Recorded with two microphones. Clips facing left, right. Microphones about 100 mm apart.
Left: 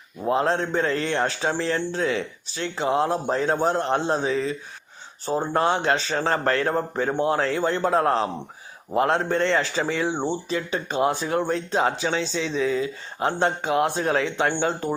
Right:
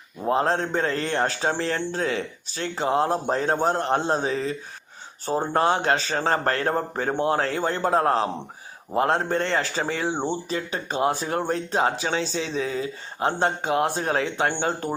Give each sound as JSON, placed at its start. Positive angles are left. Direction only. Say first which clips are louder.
{"t": 0.3, "sound": "speech", "louder": "even", "side_deg": -40}